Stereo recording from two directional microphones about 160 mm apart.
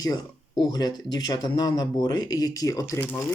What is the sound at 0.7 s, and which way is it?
Speech, 25° left (ahead or behind).